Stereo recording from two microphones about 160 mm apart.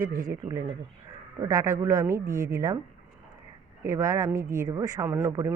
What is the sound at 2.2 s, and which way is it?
Speech, 60° right (ahead or behind).